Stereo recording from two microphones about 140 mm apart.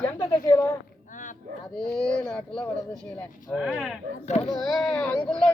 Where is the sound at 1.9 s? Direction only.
5° left (ahead or behind).